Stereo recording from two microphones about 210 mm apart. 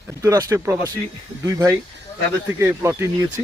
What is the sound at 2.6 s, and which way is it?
Speech, 10° right (ahead or behind).